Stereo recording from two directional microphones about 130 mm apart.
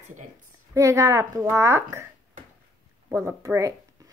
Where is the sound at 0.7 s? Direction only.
25° right (ahead or behind).